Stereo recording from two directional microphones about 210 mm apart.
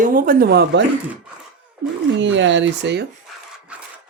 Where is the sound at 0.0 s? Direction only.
40° right (ahead or behind).